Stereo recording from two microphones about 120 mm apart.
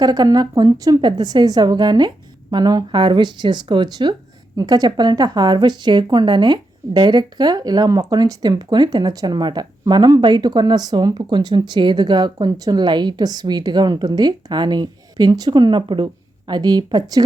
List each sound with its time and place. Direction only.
0.0 s speech: 35° right (ahead or behind)